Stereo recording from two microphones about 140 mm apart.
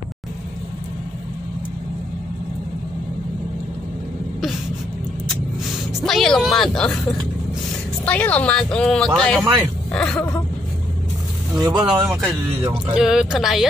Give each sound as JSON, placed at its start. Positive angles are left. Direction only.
{"t": 5.9, "sound": "speech", "side_deg": 0}
{"t": 8.0, "sound": "speech", "side_deg": 10}
{"t": 11.5, "sound": "speech", "side_deg": -30}
{"t": 12.9, "sound": "speech", "side_deg": -5}